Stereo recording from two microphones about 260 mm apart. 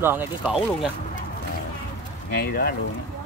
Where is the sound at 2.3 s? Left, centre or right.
Left.